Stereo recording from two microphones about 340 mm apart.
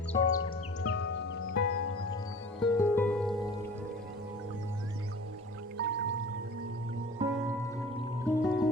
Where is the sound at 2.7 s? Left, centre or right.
Centre.